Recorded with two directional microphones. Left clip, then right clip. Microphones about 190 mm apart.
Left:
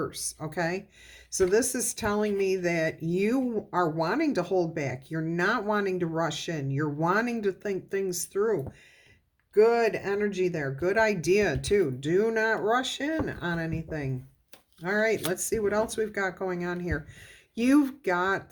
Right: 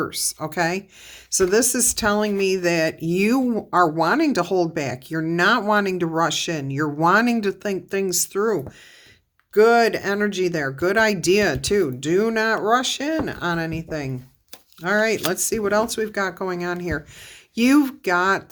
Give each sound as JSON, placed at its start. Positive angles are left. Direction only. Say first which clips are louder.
{"t": 0.0, "sound": "speech", "louder": "right 8 dB", "side_deg": -35}